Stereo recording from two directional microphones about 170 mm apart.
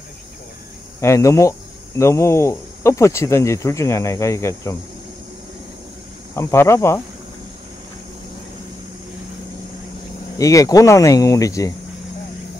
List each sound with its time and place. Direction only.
1.0 s speech: 15° left (ahead or behind)
6.3 s speech: 15° left (ahead or behind)
10.3 s speech: 20° left (ahead or behind)